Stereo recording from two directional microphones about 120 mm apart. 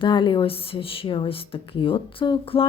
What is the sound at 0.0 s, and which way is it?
A woman's voice, 40° left (ahead or behind).